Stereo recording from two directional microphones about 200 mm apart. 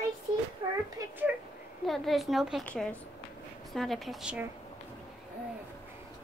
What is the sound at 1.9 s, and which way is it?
A woman's voice, centre (ahead or behind).